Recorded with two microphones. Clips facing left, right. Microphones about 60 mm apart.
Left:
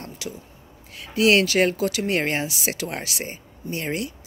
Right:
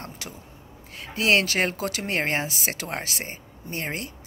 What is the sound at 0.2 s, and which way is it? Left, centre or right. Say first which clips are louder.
Speech: left 5 dB; right.